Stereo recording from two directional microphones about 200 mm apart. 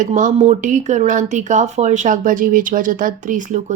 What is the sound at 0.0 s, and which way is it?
Speech, 35° right (ahead or behind).